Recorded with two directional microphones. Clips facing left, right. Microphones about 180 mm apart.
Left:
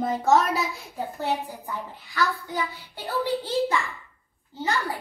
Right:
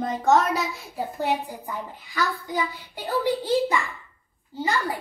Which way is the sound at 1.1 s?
15° right (ahead or behind).